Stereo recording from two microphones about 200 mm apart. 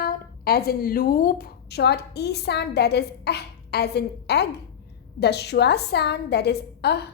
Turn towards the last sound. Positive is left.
turn(degrees=55)  # may be behind; listen again after turning